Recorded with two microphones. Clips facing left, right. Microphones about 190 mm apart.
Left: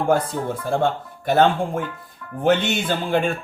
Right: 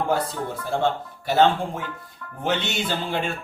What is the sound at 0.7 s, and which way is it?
Speech, 50° left (ahead or behind).